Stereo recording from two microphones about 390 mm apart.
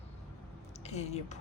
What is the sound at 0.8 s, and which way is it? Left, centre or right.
Speech, centre.